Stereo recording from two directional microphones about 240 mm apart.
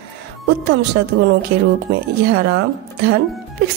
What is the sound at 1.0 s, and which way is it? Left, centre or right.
Speech, right.